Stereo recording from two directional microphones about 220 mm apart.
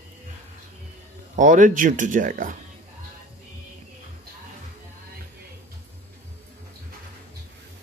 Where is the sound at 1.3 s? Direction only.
35° right (ahead or behind).